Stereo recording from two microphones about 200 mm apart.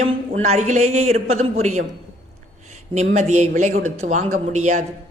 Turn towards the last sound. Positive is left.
turn(degrees=-35)  # may be behind; listen again after turning